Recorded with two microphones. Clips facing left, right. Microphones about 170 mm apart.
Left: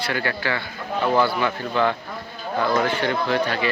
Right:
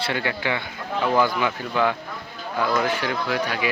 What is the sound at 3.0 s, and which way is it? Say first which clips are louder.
Speech: left 3 dB; 5° right (ahead or behind).